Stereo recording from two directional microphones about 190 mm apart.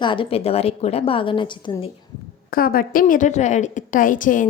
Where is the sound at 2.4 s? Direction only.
50° left (ahead or behind).